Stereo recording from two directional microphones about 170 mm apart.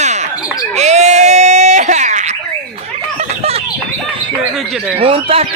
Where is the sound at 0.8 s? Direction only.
40° right (ahead or behind).